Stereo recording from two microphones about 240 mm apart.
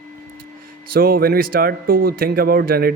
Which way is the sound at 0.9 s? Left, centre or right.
Right.